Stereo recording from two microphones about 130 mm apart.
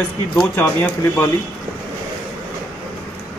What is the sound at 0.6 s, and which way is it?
Speech, 20° left (ahead or behind).